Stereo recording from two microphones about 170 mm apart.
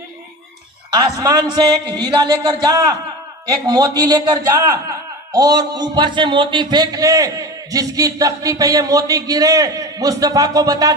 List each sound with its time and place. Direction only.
0.8 s a man's voice: 20° right (ahead or behind)